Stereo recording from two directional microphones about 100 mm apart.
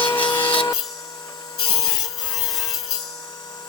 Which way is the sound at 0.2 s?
50° left (ahead or behind).